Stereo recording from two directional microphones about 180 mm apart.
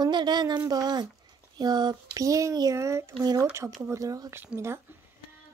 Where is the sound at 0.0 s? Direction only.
25° right (ahead or behind).